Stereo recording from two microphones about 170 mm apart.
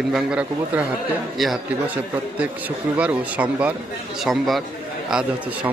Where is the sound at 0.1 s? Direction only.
5° right (ahead or behind).